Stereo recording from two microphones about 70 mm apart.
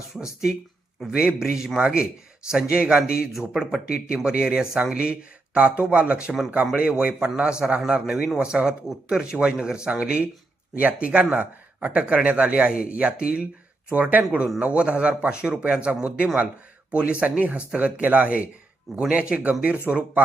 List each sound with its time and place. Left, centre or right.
1.0 s speech: centre
14.2 s speech: centre